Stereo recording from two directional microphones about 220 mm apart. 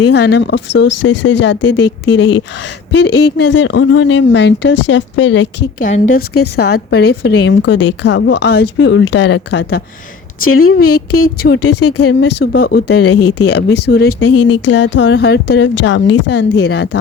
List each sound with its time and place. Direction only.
0.1 s a woman's voice: 50° left (ahead or behind)
5.8 s a woman's voice: 35° left (ahead or behind)
6.7 s a woman's voice: 45° left (ahead or behind)
8.6 s speech: 60° left (ahead or behind)
10.4 s a woman's voice: 75° left (ahead or behind); by 11.0 s 90° left
11.1 s a woman's voice: 45° left (ahead or behind)
11.5 s speech: 90° left
12.2 s a woman's voice: 45° left (ahead or behind)
12.9 s speech: 90° left
13.5 s a woman's voice: 50° left (ahead or behind)